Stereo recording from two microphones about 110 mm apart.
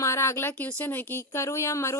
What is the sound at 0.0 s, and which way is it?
Speech, 25° left (ahead or behind).